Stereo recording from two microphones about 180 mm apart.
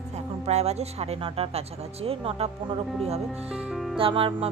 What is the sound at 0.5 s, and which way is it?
Speech, 35° right (ahead or behind).